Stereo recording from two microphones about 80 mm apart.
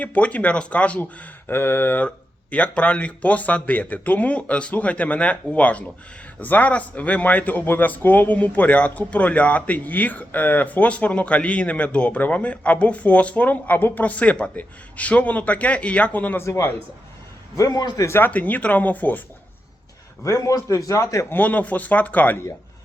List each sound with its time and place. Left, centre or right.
0.0 s speech: centre
1.5 s speech: left
2.0 s speech: centre
16.4 s a man's voice: left
17.6 s a man's voice: left
18.0 s a man's voice: left
18.3 s speech: centre
20.2 s a man's voice: left
21.3 s speech: left